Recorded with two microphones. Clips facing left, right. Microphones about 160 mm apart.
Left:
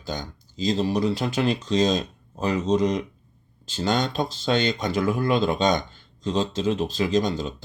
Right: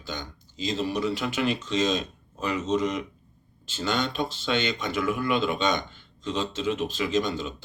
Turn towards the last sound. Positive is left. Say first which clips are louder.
# left 3 dB
turn(degrees=35)  # may be behind; listen again after turning